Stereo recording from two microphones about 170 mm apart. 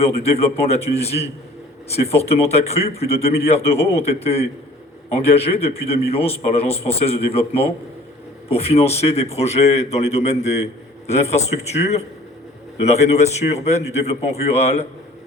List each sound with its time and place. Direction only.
0.0 s a man's voice: 35° left (ahead or behind)